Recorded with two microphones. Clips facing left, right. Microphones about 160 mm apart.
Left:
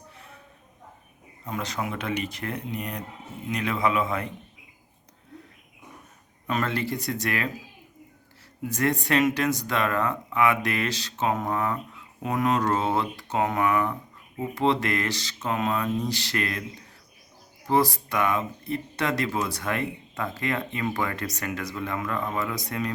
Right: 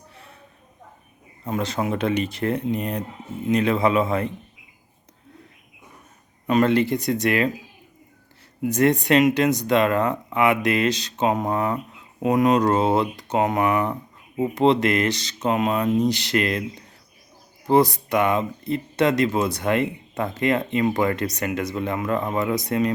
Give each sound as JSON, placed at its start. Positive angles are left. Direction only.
{"t": 1.5, "sound": "speech", "side_deg": -30}
{"t": 6.5, "sound": "speech", "side_deg": -20}
{"t": 8.6, "sound": "speech", "side_deg": -20}
{"t": 17.7, "sound": "speech", "side_deg": -20}